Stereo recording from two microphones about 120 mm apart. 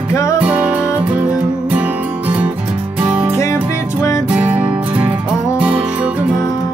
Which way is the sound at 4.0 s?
25° left (ahead or behind).